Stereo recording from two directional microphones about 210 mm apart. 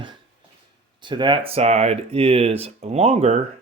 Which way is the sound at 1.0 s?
20° right (ahead or behind).